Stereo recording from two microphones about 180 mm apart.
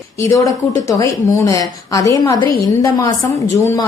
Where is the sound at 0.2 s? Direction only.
20° left (ahead or behind).